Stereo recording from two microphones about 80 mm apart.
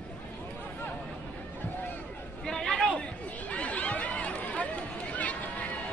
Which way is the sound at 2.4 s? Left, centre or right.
Centre.